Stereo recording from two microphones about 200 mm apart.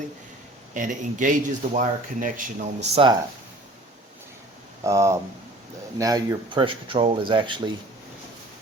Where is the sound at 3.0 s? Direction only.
30° right (ahead or behind).